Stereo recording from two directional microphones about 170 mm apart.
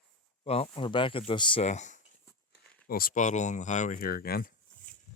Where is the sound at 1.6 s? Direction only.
45° left (ahead or behind).